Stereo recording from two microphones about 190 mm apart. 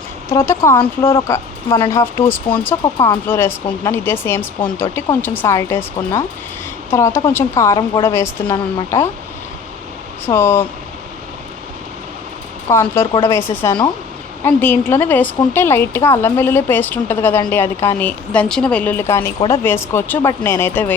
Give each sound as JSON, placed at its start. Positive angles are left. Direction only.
{"t": 0.3, "sound": "speech", "side_deg": 15}
{"t": 8.4, "sound": "a woman's voice", "side_deg": 25}
{"t": 10.2, "sound": "speech", "side_deg": 10}
{"t": 12.6, "sound": "speech", "side_deg": 15}